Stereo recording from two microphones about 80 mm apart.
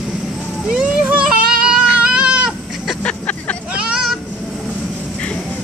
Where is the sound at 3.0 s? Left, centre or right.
Centre.